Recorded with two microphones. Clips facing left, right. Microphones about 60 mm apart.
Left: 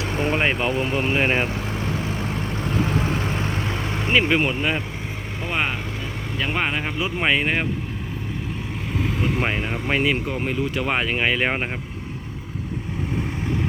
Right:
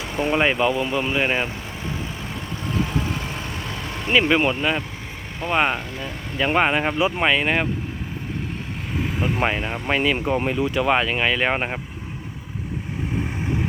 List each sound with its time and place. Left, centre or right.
0.3 s speech: centre
0.9 s speech: left
3.0 s vehicle: left
4.1 s speech: centre
5.4 s speech: centre
6.4 s speech: right
7.3 s speech: centre
9.0 s speech: centre
10.2 s speech: centre
10.5 s speech: centre